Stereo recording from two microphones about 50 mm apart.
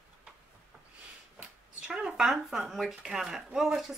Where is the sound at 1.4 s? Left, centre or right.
Centre.